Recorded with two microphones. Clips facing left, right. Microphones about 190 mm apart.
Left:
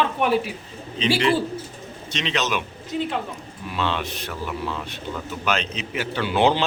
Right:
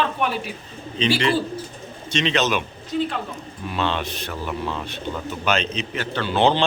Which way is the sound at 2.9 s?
15° left (ahead or behind).